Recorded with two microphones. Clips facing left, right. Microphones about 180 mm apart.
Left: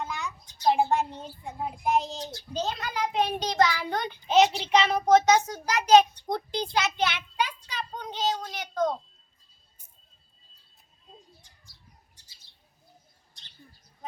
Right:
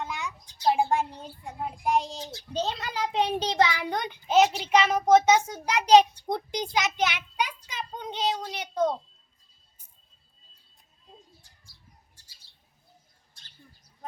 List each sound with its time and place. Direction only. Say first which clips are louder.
0.6 s a sound: left 1 dB; 5° left (ahead or behind)
1.6 s speech: even; 5° left (ahead or behind)
2.6 s a child's voice: even; 30° right (ahead or behind)